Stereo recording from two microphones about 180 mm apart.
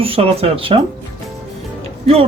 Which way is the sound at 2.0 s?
35° right (ahead or behind).